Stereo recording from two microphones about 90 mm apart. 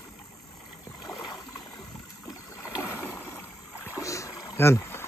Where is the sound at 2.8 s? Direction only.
25° left (ahead or behind).